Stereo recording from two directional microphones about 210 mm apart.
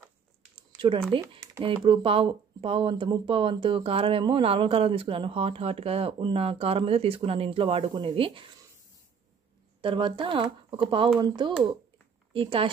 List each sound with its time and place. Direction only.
0.6 s a sound: 25° right (ahead or behind)
1.1 s speech: 20° right (ahead or behind)
9.8 s speech: 25° right (ahead or behind)